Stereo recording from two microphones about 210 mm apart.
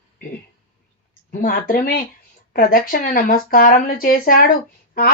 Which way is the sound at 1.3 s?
40° left (ahead or behind).